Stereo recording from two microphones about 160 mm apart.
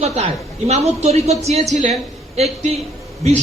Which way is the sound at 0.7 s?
40° right (ahead or behind).